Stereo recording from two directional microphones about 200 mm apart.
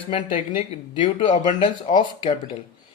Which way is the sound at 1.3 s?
40° left (ahead or behind).